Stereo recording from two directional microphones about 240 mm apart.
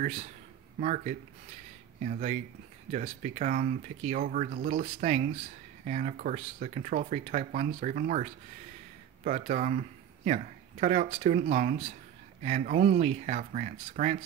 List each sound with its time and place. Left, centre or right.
0.0 s speech: right